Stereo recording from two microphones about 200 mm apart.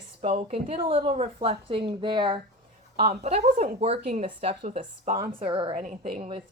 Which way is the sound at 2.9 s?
35° right (ahead or behind).